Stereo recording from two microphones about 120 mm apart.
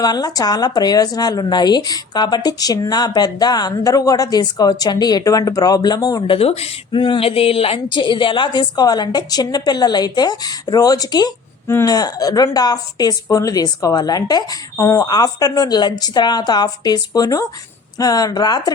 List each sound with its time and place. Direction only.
0.0 s speech: 35° left (ahead or behind)
6.2 s speech: 50° left (ahead or behind); by 18.7 s 35° left (ahead or behind)